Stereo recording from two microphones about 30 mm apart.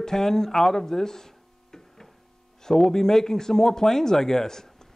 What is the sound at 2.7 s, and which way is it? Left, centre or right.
Speech, centre.